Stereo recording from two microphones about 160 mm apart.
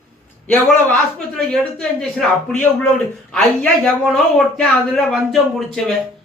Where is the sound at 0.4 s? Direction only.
10° left (ahead or behind).